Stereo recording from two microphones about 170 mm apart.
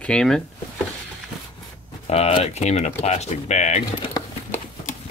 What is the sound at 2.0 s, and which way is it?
Speech, 35° left (ahead or behind).